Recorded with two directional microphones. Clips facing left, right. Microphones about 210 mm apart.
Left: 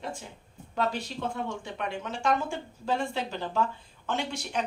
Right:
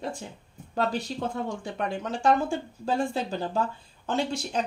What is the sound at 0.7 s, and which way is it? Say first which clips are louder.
Speech: right 2 dB; 35° right (ahead or behind).